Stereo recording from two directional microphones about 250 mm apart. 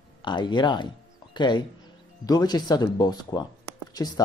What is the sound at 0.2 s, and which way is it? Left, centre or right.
Speech, centre.